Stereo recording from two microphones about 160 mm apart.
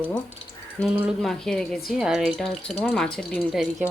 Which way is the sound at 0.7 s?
5° right (ahead or behind).